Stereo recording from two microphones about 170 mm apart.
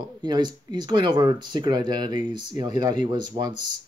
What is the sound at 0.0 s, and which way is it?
Speech, 25° right (ahead or behind).